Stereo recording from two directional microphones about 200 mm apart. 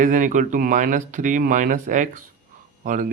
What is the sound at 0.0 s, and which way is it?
Speech, 40° right (ahead or behind).